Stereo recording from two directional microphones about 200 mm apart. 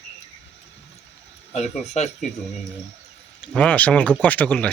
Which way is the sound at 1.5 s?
35° left (ahead or behind).